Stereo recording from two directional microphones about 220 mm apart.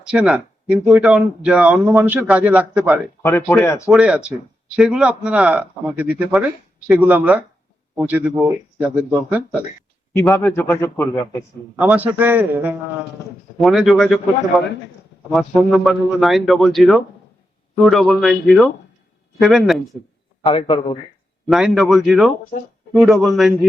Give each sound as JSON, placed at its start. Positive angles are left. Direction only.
{"t": 0.0, "sound": "speech", "side_deg": -5}
{"t": 3.5, "sound": "a man's voice", "side_deg": 15}
{"t": 3.9, "sound": "speech", "side_deg": -5}
{"t": 10.2, "sound": "a man's voice", "side_deg": 10}
{"t": 11.8, "sound": "a man's voice", "side_deg": -5}
{"t": 19.4, "sound": "speech", "side_deg": 0}
{"t": 20.4, "sound": "a man's voice", "side_deg": 25}
{"t": 21.4, "sound": "speech", "side_deg": 0}